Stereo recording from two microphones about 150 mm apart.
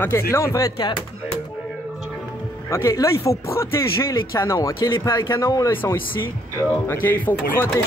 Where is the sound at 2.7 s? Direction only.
20° left (ahead or behind).